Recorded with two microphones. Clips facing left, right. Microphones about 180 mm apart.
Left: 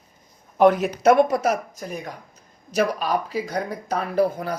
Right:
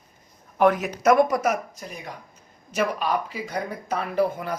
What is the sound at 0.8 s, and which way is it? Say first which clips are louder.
Speech: left 2 dB; 30° left (ahead or behind).